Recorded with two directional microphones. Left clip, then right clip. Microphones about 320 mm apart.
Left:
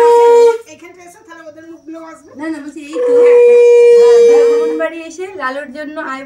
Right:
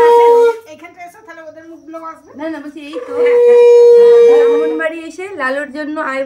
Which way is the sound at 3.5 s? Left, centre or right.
Centre.